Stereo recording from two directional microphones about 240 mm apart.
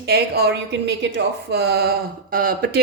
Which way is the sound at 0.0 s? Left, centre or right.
Right.